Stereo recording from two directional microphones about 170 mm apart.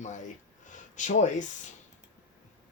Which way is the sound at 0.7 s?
45° left (ahead or behind).